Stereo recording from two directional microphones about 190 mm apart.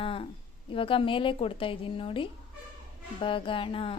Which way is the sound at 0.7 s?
30° left (ahead or behind).